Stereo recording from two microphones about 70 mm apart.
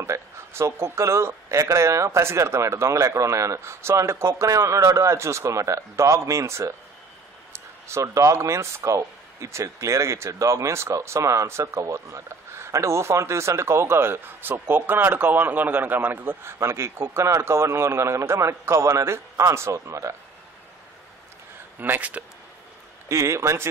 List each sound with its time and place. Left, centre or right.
0.0 s speech: right
21.7 s speech: right
23.0 s speech: right